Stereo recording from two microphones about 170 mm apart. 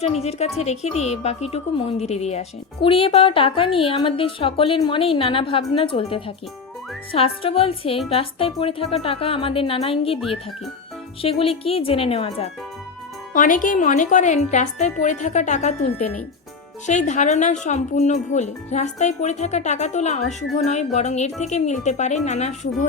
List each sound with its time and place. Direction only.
0.0 s speech: 40° left (ahead or behind)
11.2 s speech: 35° left (ahead or behind)
13.3 s speech: 50° left (ahead or behind)